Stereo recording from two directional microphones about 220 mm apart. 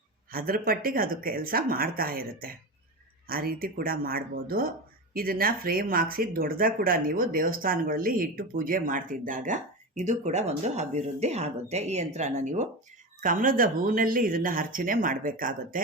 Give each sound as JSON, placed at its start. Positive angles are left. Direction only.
{"t": 0.3, "sound": "speech", "side_deg": -40}